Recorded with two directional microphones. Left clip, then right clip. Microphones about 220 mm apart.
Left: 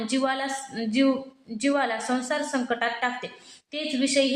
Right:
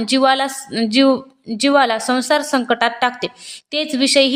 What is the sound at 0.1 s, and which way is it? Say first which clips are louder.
A woman's voice: right 12 dB; 40° right (ahead or behind).